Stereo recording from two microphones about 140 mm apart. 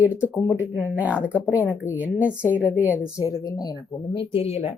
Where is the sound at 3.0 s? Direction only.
25° left (ahead or behind); by 4.7 s 45° left (ahead or behind).